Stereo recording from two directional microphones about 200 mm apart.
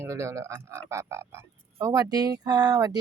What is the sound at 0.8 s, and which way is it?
Speech, 15° right (ahead or behind).